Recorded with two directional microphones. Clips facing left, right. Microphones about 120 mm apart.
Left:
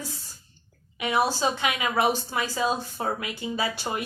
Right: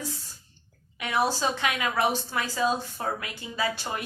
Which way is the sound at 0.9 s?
15° left (ahead or behind).